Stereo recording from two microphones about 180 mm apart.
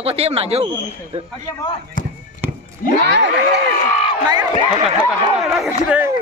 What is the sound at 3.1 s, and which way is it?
Speech, 70° right (ahead or behind).